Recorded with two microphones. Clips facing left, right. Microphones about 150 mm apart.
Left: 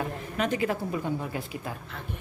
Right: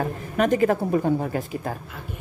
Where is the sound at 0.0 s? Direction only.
45° right (ahead or behind).